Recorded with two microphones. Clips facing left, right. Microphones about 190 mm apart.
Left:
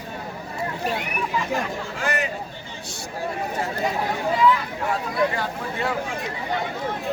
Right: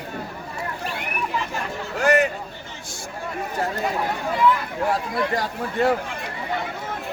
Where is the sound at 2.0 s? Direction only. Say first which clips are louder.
Right 9 dB; 45° right (ahead or behind).